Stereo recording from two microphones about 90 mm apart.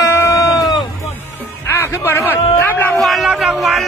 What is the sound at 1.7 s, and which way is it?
A man's voice, 25° left (ahead or behind).